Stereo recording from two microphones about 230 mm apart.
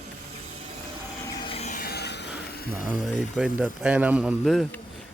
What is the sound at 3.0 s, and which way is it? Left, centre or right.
Speech, centre.